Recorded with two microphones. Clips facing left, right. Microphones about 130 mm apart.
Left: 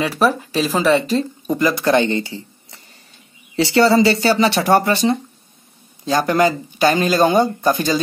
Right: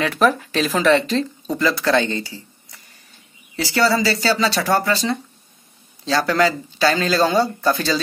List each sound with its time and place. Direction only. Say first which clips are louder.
0.2 s speech: even; 10° left (ahead or behind)